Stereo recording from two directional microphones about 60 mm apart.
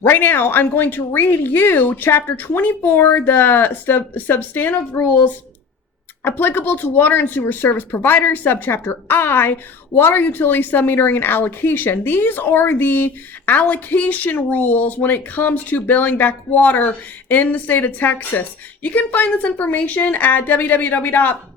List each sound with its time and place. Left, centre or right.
0.0 s speech: left